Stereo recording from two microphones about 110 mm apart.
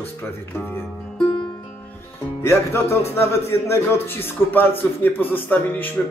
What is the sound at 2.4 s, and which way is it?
A man's voice, 20° left (ahead or behind).